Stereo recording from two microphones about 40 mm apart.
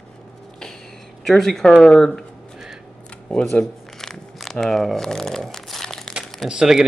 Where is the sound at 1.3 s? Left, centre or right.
Centre.